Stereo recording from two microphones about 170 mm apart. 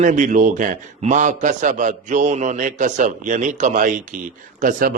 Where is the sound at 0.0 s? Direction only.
45° right (ahead or behind).